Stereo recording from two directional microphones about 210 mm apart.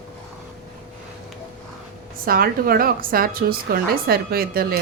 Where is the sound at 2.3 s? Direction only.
45° right (ahead or behind).